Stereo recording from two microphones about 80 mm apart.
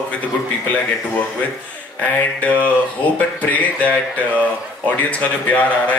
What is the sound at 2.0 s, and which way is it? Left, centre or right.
A man's voice, centre.